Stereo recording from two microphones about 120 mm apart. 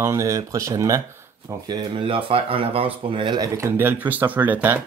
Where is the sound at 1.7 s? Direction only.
45° right (ahead or behind).